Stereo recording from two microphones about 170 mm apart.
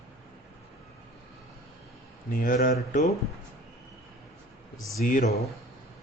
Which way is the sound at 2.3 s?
55° left (ahead or behind).